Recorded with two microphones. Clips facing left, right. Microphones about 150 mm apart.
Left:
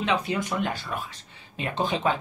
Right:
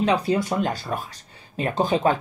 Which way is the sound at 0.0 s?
35° right (ahead or behind).